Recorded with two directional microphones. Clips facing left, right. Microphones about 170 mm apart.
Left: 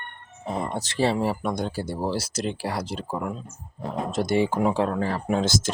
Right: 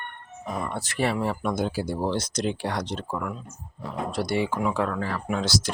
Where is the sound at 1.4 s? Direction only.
Centre (ahead or behind).